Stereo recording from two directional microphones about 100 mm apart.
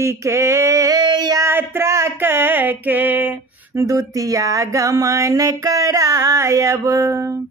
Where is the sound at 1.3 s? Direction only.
25° right (ahead or behind).